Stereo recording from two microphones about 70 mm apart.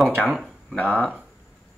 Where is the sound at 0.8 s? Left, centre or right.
Left.